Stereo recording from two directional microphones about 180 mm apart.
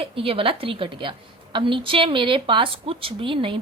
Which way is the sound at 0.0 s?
30° right (ahead or behind).